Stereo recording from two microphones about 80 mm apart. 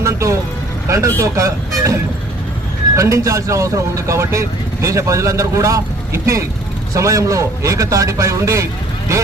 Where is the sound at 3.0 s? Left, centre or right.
Right.